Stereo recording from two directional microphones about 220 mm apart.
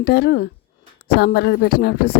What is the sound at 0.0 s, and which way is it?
A woman's voice, 45° left (ahead or behind).